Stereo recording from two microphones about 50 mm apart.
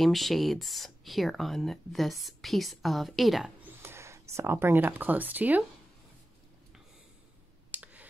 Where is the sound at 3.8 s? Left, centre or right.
Right.